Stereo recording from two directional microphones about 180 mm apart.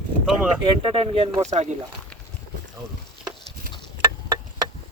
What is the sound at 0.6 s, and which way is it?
Speech, 30° right (ahead or behind).